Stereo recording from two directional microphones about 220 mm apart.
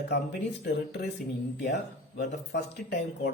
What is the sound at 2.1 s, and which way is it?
Speech, 45° left (ahead or behind).